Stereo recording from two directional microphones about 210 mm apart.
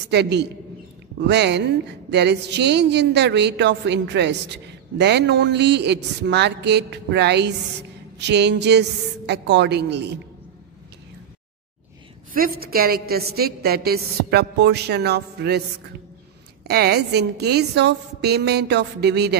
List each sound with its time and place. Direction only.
0.1 s a woman's voice: 55° right (ahead or behind)
12.4 s a woman's voice: 45° right (ahead or behind)
16.6 s a woman's voice: 50° right (ahead or behind)